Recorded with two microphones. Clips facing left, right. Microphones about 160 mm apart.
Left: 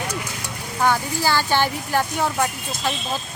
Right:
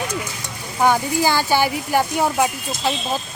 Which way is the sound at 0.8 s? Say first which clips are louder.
Right 4 dB; 15° right (ahead or behind).